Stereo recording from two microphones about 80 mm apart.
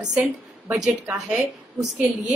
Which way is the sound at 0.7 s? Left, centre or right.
Centre.